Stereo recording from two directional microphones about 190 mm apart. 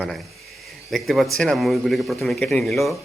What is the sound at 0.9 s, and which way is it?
Speech, centre (ahead or behind).